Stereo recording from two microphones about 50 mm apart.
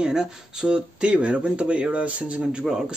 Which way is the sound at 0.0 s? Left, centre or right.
Centre.